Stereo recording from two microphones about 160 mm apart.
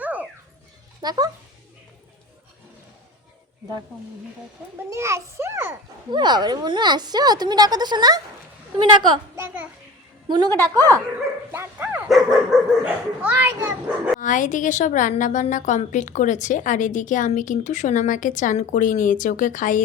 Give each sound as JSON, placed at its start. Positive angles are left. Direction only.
{"t": 0.0, "sound": "dog", "side_deg": -10}
{"t": 1.0, "sound": "a woman's voice", "side_deg": -25}
{"t": 4.8, "sound": "speech", "side_deg": -15}
{"t": 6.1, "sound": "a woman's voice", "side_deg": -30}
{"t": 11.5, "sound": "dog", "side_deg": -10}
{"t": 12.0, "sound": "speech", "side_deg": 0}
{"t": 14.2, "sound": "a woman's voice", "side_deg": 55}